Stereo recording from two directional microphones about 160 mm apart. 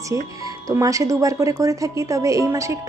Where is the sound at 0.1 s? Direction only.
20° right (ahead or behind).